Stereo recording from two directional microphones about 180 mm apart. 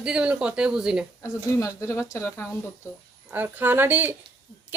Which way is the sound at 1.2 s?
15° left (ahead or behind).